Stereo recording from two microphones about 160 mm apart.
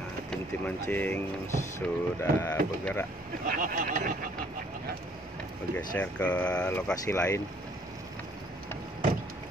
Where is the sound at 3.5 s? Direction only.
60° right (ahead or behind).